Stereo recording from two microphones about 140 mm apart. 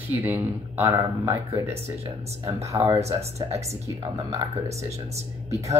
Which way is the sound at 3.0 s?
50° right (ahead or behind).